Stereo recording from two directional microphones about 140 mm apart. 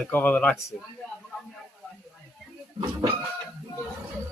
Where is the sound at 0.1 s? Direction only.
10° left (ahead or behind).